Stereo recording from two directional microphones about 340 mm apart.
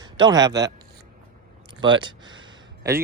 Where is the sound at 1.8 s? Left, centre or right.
Centre.